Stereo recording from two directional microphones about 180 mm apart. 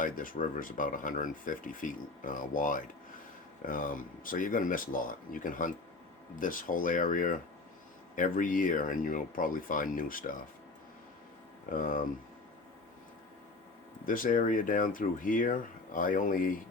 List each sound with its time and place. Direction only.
0.0 s speech: 50° left (ahead or behind)
11.7 s speech: 50° left (ahead or behind)
14.0 s speech: 50° left (ahead or behind)